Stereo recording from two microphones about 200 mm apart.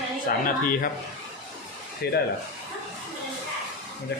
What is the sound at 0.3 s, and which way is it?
Speech, 45° left (ahead or behind).